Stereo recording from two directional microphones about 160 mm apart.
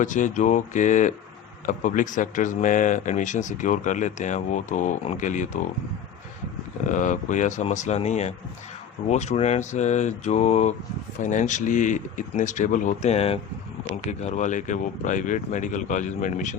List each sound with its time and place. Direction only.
0.0 s speech: 50° left (ahead or behind)
6.8 s speech: 50° left (ahead or behind)